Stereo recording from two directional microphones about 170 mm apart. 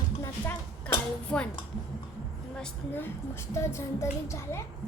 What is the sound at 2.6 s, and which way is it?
A woman's voice, 10° left (ahead or behind).